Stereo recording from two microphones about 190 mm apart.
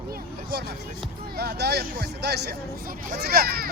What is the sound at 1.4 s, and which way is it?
Speech, 60° right (ahead or behind).